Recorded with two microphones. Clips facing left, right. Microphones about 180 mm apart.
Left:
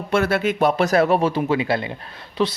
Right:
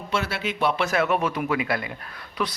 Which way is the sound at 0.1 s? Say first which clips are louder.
Left 8 dB; 50° left (ahead or behind).